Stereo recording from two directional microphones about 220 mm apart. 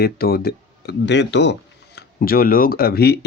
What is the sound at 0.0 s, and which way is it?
Speech, 45° left (ahead or behind).